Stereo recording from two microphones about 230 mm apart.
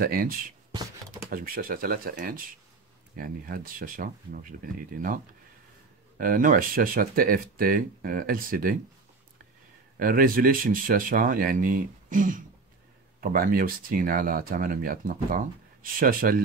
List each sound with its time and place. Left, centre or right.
0.0 s speech: right
9.9 s speech: right